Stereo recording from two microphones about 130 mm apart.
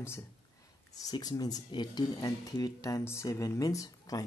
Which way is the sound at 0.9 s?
30° left (ahead or behind).